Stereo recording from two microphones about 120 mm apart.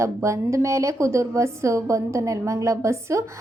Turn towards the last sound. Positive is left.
turn(degrees=-25)  # may be behind; listen again after turning